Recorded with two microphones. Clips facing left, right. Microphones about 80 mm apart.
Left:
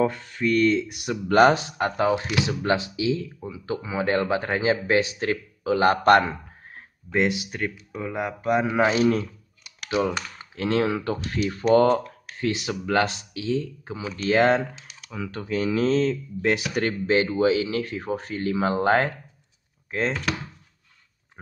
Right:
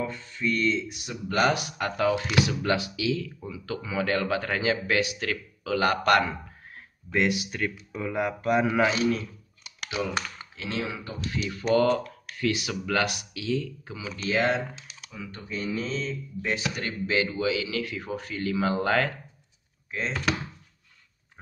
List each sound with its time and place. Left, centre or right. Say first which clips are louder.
0.0 s speech: left 7 dB; left
1.4 s speech: left 6 dB; left
9.8 s speech: left 5 dB; left
11.7 s speech: left 4 dB; left
13.9 s speech: left 6 dB; left
15.0 s speech: left 8 dB; left
17.0 s speech: left 5 dB; left
19.9 s speech: left 6 dB; left